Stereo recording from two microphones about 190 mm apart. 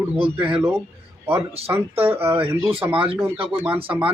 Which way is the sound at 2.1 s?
10° right (ahead or behind).